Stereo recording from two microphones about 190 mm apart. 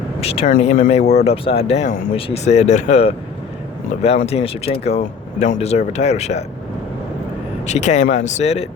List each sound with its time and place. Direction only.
0.2 s speech: 30° left (ahead or behind)
7.7 s speech: 35° left (ahead or behind)